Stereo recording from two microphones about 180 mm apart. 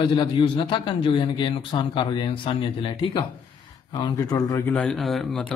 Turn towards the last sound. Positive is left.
turn(degrees=0)  # may be behind; listen again after turning